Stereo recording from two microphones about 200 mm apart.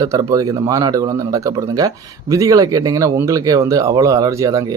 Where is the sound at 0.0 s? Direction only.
15° right (ahead or behind).